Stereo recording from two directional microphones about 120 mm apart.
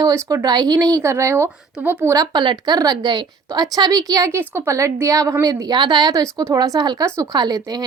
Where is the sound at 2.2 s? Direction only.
40° right (ahead or behind).